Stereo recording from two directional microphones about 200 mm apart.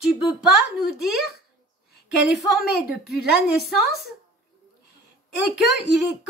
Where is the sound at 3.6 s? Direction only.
55° right (ahead or behind).